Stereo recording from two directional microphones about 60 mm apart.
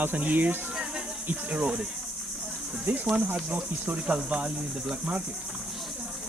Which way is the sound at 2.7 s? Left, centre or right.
Right.